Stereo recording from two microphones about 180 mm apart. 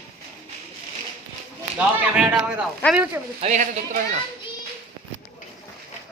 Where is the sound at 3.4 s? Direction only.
40° right (ahead or behind).